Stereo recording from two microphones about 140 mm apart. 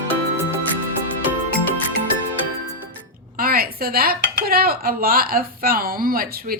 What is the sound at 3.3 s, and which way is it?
Speech, 90° right.